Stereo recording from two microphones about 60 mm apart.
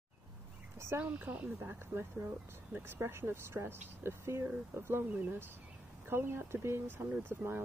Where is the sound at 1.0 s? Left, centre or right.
Right.